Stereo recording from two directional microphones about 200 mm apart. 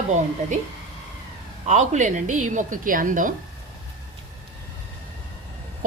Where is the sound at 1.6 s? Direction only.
35° right (ahead or behind).